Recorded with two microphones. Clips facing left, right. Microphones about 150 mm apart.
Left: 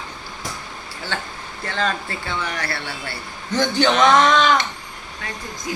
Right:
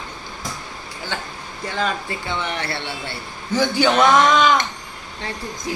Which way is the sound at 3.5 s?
10° right (ahead or behind).